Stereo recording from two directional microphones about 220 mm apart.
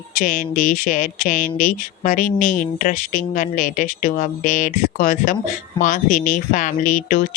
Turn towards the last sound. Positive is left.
turn(degrees=35)  # may be behind; listen again after turning